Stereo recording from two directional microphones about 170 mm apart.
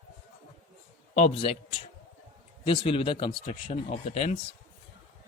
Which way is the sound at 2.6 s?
30° left (ahead or behind).